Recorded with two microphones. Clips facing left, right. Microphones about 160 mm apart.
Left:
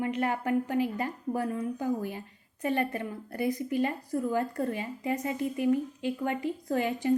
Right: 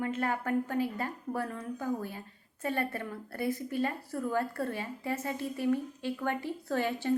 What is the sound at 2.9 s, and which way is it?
A woman's voice, 15° left (ahead or behind).